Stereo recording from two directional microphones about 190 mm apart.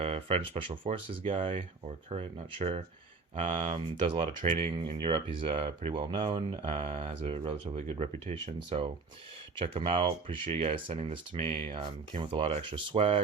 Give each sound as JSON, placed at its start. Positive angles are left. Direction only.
{"t": 0.0, "sound": "speech", "side_deg": -30}